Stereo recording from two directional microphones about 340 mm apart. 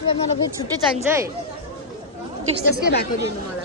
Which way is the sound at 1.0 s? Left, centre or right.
Centre.